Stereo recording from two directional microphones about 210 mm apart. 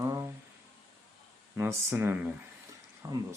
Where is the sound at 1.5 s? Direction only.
10° right (ahead or behind).